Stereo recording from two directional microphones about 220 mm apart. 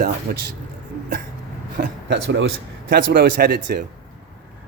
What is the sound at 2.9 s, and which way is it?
Speech, 40° right (ahead or behind).